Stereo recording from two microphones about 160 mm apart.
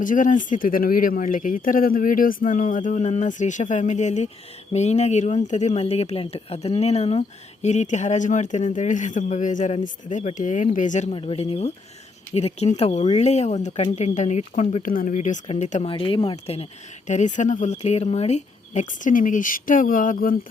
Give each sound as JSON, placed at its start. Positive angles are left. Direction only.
{"t": 0.0, "sound": "speech", "side_deg": 55}
{"t": 11.1, "sound": "speech", "side_deg": 35}
{"t": 15.9, "sound": "speech", "side_deg": 35}
{"t": 17.1, "sound": "speech", "side_deg": 50}